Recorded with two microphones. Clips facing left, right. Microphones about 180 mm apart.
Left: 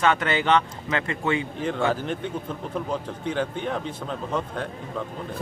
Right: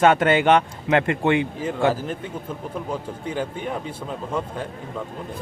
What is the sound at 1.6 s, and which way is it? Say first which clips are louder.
A man's voice: right 3 dB; 5° right (ahead or behind).